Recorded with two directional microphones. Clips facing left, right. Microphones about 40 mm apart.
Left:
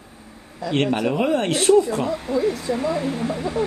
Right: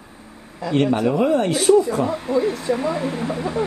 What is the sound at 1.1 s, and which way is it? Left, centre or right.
Speech, left.